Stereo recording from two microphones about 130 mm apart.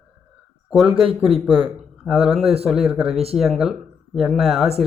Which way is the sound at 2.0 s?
5° right (ahead or behind).